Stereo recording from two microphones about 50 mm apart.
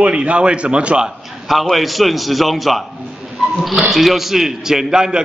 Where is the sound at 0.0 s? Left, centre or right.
Right.